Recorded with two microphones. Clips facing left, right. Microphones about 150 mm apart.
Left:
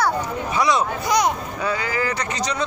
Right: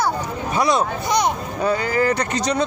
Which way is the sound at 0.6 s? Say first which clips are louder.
Right 1 dB; 55° right (ahead or behind).